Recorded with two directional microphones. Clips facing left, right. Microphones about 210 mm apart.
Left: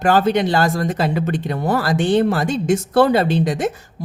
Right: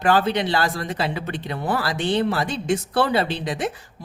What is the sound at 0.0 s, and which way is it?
Speech, 45° left (ahead or behind).